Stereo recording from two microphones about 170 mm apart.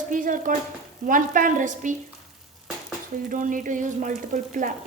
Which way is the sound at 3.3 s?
50° right (ahead or behind).